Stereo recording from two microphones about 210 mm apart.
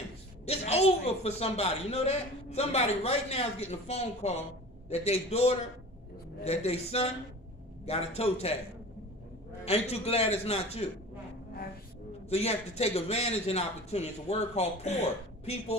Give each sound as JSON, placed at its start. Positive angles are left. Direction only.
{"t": 0.5, "sound": "a man's voice", "side_deg": 30}
{"t": 9.7, "sound": "a man's voice", "side_deg": 30}
{"t": 12.3, "sound": "a man's voice", "side_deg": 30}